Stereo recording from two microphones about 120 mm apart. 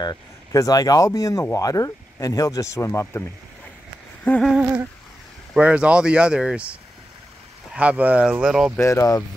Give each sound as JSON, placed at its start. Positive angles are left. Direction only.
{"t": 0.0, "sound": "speech", "side_deg": 30}
{"t": 4.4, "sound": "humming", "side_deg": -5}
{"t": 5.5, "sound": "speech", "side_deg": -10}
{"t": 8.7, "sound": "speech", "side_deg": 20}